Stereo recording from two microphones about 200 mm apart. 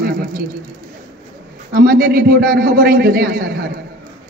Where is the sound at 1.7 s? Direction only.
50° right (ahead or behind).